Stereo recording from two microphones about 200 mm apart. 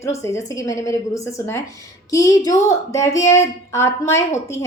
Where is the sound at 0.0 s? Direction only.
15° left (ahead or behind).